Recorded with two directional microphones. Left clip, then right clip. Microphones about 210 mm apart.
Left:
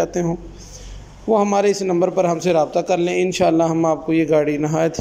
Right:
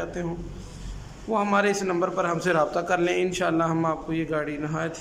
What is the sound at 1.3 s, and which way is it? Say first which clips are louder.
A man's voice: left 7 dB; 25° left (ahead or behind).